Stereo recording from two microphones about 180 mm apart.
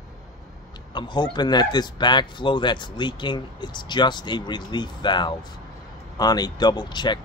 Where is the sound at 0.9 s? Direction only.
25° left (ahead or behind).